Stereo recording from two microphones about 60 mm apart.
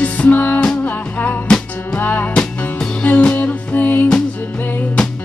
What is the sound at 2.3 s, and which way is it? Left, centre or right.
Music, centre.